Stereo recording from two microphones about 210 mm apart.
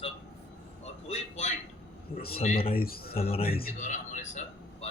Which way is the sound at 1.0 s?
30° left (ahead or behind).